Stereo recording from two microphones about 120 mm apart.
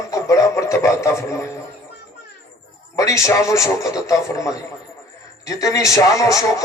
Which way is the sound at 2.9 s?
25° left (ahead or behind).